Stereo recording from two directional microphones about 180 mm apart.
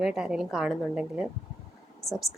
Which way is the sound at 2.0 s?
20° left (ahead or behind).